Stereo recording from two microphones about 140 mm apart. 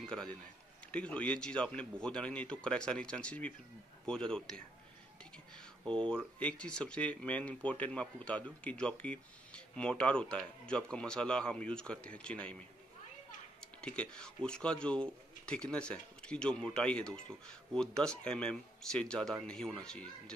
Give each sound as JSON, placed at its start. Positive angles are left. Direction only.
{"t": 0.0, "sound": "a man's voice", "side_deg": 5}
{"t": 5.9, "sound": "speech", "side_deg": 5}
{"t": 13.6, "sound": "speech", "side_deg": 5}